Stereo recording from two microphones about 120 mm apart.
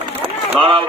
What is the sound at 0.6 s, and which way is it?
Speech, 45° right (ahead or behind).